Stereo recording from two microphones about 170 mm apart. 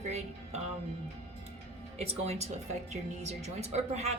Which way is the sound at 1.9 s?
40° right (ahead or behind).